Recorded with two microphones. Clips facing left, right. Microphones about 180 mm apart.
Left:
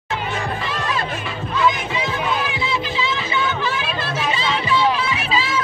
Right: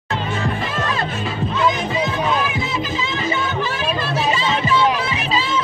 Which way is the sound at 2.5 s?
45° right (ahead or behind).